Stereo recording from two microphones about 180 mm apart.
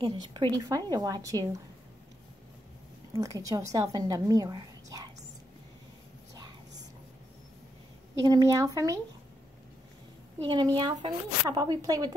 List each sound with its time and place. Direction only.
0.0 s a woman's voice: 25° right (ahead or behind)
3.2 s a woman's voice: 20° right (ahead or behind)
8.1 s a woman's voice: 20° right (ahead or behind)
10.4 s a woman's voice: 25° right (ahead or behind)